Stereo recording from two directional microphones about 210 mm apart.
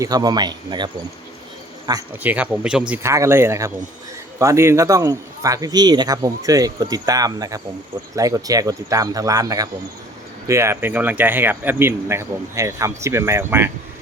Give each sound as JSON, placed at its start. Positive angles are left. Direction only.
{"t": 0.0, "sound": "speech", "side_deg": -20}
{"t": 1.9, "sound": "speech", "side_deg": -10}